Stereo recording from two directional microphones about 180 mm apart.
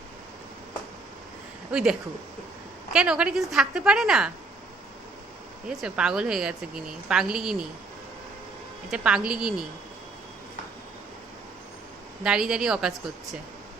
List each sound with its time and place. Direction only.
1.7 s a woman's voice: 5° right (ahead or behind)
5.6 s a woman's voice: 5° right (ahead or behind)
8.9 s a woman's voice: 5° right (ahead or behind)
12.2 s a woman's voice: 5° right (ahead or behind)